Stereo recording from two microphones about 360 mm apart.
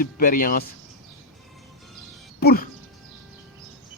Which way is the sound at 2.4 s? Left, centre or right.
Left.